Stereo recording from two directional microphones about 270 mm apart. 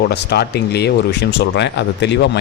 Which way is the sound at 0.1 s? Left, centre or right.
Left.